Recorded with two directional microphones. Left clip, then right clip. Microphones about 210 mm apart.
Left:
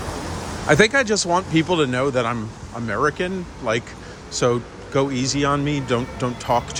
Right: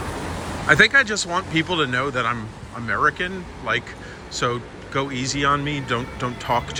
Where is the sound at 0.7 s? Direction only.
30° left (ahead or behind).